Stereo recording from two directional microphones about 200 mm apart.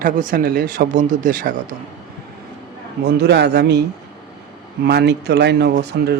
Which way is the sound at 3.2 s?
55° right (ahead or behind).